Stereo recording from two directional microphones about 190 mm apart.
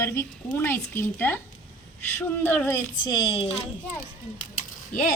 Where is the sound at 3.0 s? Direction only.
25° left (ahead or behind).